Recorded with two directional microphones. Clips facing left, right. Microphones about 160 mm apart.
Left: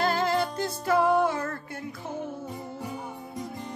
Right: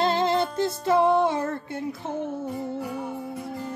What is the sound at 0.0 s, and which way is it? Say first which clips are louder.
Music: right 3 dB; 25° right (ahead or behind).